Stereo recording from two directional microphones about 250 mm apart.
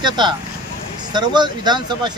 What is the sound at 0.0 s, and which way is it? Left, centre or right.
Speech, centre.